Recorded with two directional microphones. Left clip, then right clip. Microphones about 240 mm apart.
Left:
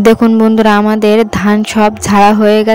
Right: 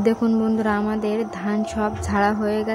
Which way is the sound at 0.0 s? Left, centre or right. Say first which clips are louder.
Left 13 dB; left.